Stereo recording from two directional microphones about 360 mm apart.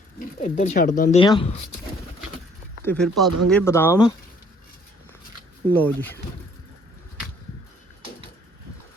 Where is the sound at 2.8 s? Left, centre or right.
Centre.